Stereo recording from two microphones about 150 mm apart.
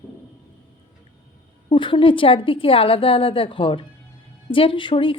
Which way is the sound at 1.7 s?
35° left (ahead or behind).